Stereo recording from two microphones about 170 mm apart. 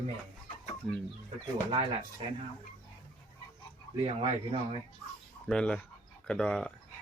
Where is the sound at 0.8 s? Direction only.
5° left (ahead or behind).